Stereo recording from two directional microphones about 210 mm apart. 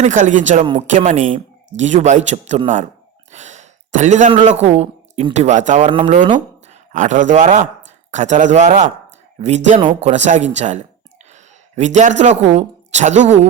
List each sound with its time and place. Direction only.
0.0 s speech: 35° right (ahead or behind)
6.2 s a sound: 25° right (ahead or behind)
6.9 s speech: 35° right (ahead or behind)